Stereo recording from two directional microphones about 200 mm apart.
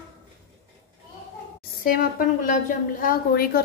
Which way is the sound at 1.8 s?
45° left (ahead or behind).